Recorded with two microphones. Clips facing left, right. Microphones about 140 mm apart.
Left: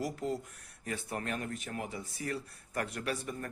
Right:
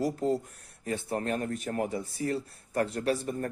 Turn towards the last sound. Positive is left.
turn(degrees=-35)  # may be behind; listen again after turning